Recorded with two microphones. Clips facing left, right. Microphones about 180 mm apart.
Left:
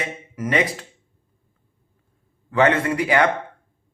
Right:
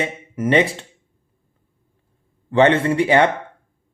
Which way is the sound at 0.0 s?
25° right (ahead or behind).